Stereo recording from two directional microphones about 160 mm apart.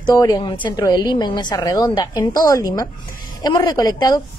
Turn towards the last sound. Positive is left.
turn(degrees=25)  # may be behind; listen again after turning